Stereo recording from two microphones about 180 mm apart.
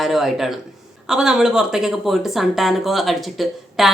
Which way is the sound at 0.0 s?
Centre (ahead or behind).